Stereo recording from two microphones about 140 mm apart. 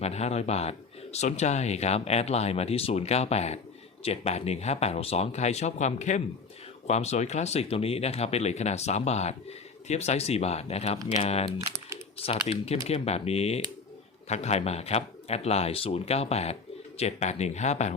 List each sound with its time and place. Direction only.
0.0 s speech: 50° left (ahead or behind)